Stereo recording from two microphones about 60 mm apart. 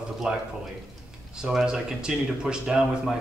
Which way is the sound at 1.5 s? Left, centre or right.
Centre.